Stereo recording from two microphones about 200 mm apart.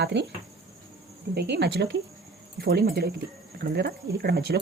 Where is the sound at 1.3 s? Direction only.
55° right (ahead or behind).